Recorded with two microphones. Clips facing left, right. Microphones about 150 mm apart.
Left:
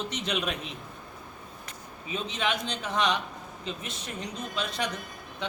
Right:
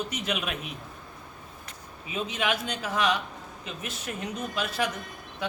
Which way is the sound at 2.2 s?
5° right (ahead or behind).